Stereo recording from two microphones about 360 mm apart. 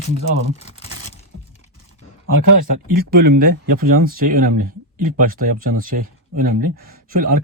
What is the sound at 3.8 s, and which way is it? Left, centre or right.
Speech, right.